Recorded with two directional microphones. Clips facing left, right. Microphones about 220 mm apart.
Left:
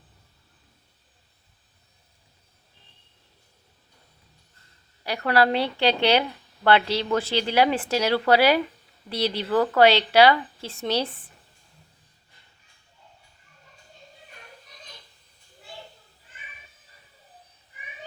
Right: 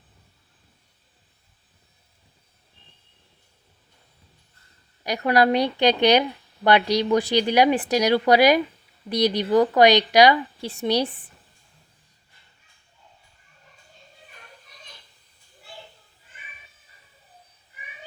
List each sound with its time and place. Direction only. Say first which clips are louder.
5.0 s speech: right 2 dB; 15° right (ahead or behind)